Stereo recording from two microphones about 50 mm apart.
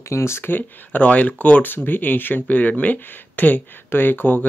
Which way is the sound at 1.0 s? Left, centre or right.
Left.